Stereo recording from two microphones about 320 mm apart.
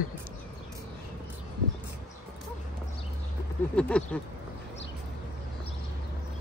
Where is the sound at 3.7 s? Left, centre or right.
Centre.